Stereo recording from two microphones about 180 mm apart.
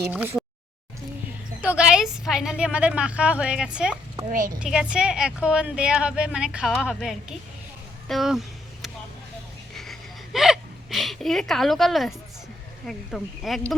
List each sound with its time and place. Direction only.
0.0 s a sound: 10° right (ahead or behind)
1.6 s speech: 5° right (ahead or behind)
4.3 s a woman's voice: 50° right (ahead or behind)
4.6 s speech: 5° right (ahead or behind)
9.7 s hiccup: centre (ahead or behind)
12.8 s speech: centre (ahead or behind)